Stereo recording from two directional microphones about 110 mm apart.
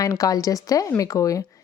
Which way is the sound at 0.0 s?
30° left (ahead or behind).